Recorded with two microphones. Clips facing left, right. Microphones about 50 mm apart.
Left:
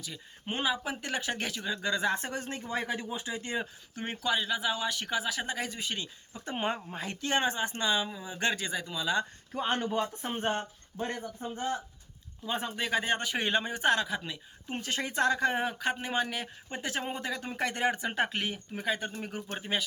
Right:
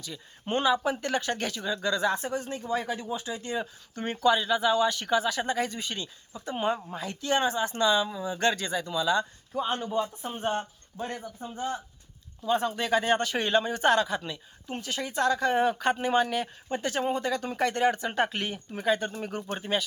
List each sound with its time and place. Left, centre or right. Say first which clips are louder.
0.0 s speech: right 3 dB; centre
2.1 s speech: right 3 dB; left
3.9 s speech: right 7 dB; centre
6.3 s speech: right 4 dB; left; by 9.2 s centre
9.5 s speech: even; left
12.5 s speech: right 6 dB; centre
13.8 s speech: right 4 dB; centre
14.8 s speech: even; left
15.1 s speech: right 2 dB; left
15.8 s speech: right 6 dB; centre